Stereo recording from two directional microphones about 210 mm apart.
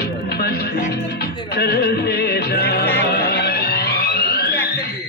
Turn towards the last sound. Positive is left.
turn(degrees=50)  # may be behind; listen again after turning